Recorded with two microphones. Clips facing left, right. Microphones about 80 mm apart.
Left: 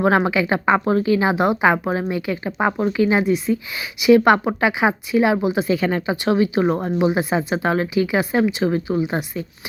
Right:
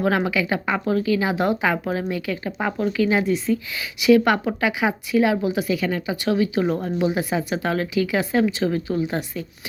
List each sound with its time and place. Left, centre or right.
0.0 s a woman's voice: left